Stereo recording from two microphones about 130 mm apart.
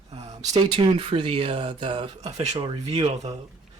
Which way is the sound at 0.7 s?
40° right (ahead or behind).